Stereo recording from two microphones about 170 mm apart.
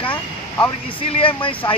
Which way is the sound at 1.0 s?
30° left (ahead or behind).